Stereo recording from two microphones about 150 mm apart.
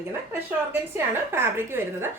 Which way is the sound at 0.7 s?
15° right (ahead or behind).